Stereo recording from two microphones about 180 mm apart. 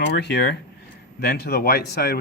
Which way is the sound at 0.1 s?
65° left (ahead or behind).